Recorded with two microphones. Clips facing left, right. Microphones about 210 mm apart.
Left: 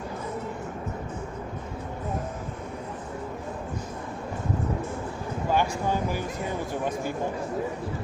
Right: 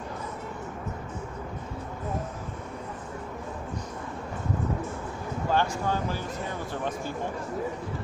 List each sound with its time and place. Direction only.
5.5 s speech: 10° left (ahead or behind)